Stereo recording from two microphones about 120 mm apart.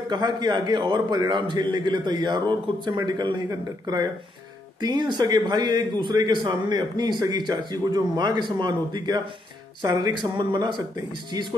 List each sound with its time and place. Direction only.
0.1 s a man's voice: 35° right (ahead or behind)